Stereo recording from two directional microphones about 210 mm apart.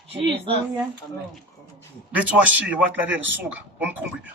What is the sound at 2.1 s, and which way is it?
A man's voice, 5° right (ahead or behind).